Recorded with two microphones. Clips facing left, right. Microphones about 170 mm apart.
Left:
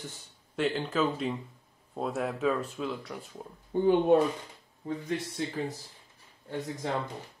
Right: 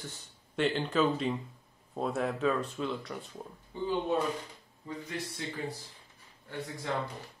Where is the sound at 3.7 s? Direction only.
55° left (ahead or behind).